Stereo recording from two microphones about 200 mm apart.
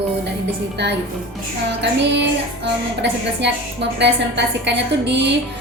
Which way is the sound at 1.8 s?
60° right (ahead or behind).